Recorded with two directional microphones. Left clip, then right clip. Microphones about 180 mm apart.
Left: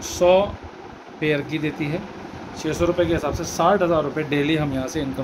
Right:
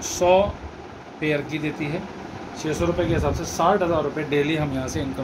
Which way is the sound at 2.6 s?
60° left (ahead or behind).